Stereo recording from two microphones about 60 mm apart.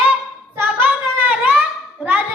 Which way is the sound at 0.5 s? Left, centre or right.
Right.